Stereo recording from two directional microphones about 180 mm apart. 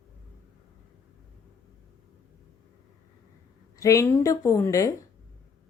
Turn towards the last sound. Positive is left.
turn(degrees=20)  # may be behind; listen again after turning